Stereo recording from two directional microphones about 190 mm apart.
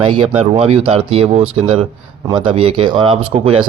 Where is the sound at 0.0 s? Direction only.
30° right (ahead or behind).